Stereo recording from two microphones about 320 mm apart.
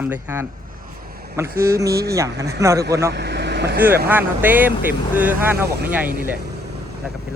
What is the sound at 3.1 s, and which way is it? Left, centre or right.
Speech, right.